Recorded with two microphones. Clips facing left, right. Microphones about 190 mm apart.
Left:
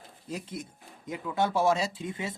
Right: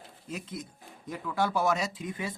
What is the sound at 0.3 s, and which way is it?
Speech, 30° left (ahead or behind).